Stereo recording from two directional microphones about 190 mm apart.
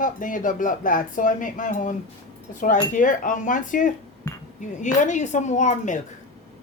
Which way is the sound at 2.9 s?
45° left (ahead or behind).